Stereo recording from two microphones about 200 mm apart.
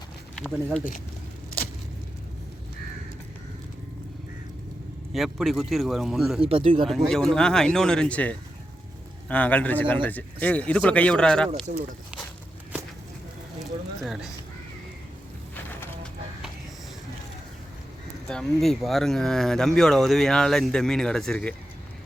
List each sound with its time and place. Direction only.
0.3 s speech: 5° left (ahead or behind)
5.1 s speech: centre (ahead or behind)
6.4 s speech: 30° right (ahead or behind)
6.8 s speech: centre (ahead or behind)
14.0 s speech: centre (ahead or behind)
18.3 s speech: centre (ahead or behind)